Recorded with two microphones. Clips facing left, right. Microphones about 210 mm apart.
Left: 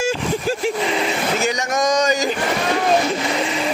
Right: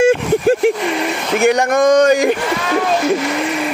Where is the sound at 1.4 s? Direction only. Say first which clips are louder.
Right 8 dB; 55° right (ahead or behind).